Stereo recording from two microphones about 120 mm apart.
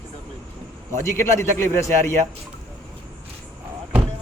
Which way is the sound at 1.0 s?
25° left (ahead or behind).